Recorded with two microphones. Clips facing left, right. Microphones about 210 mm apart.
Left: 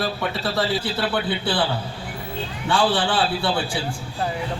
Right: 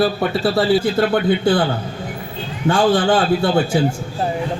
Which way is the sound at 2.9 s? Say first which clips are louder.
Right 7 dB; 40° right (ahead or behind).